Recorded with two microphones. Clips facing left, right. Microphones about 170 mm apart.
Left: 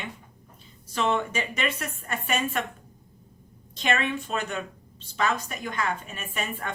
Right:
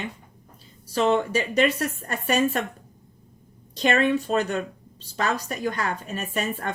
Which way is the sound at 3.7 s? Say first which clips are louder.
Right 6 dB; 35° right (ahead or behind).